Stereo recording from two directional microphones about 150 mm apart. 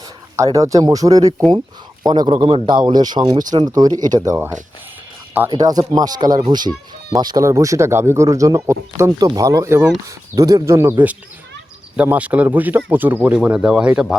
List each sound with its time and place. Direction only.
0.3 s speech: 20° right (ahead or behind)
5.5 s speech: 25° right (ahead or behind)
11.9 s speech: 10° right (ahead or behind)